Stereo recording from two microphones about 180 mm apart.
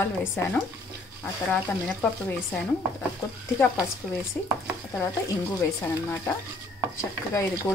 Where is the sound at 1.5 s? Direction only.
10° left (ahead or behind).